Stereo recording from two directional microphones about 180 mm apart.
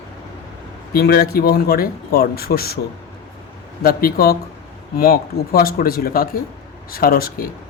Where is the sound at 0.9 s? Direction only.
60° left (ahead or behind).